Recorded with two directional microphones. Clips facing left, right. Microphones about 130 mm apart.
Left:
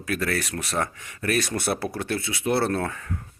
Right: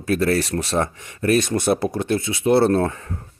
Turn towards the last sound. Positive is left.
turn(degrees=-30)  # may be behind; listen again after turning